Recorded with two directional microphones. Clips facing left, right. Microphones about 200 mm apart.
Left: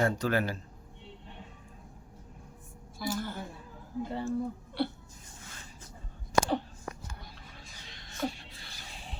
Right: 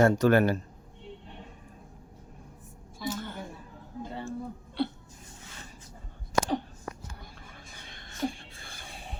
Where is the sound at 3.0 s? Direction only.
20° right (ahead or behind).